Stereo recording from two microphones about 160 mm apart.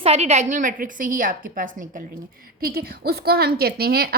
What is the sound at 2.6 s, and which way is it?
A woman's voice, 75° right (ahead or behind).